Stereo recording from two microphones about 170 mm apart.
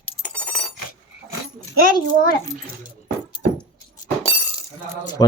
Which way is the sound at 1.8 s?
60° left (ahead or behind).